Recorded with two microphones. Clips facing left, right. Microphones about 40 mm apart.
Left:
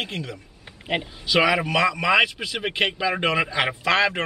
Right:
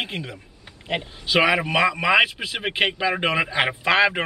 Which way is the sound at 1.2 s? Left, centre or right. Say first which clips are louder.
Right 1 dB; centre.